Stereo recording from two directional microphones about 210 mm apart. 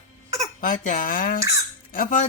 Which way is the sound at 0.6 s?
40° left (ahead or behind).